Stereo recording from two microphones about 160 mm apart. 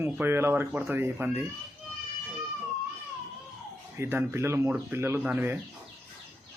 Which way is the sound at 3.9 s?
15° right (ahead or behind).